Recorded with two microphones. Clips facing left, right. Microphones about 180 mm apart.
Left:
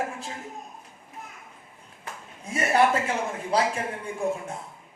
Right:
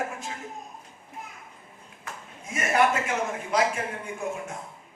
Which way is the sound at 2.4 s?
30° left (ahead or behind).